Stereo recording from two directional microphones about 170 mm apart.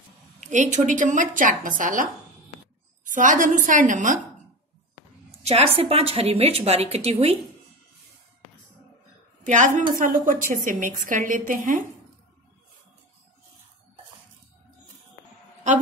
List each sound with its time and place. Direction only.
0.4 s a woman's voice: 45° right (ahead or behind)
3.1 s a woman's voice: 50° right (ahead or behind)
5.4 s a woman's voice: 35° right (ahead or behind)
9.4 s a woman's voice: 50° right (ahead or behind)